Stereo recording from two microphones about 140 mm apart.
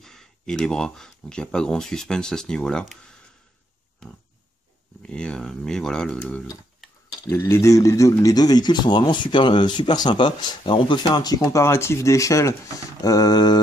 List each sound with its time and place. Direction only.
0.0 s speech: 5° left (ahead or behind)
5.0 s speech: 5° left (ahead or behind)
7.2 s speech: 20° left (ahead or behind)